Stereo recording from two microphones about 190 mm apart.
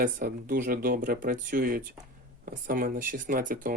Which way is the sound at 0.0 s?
45° right (ahead or behind).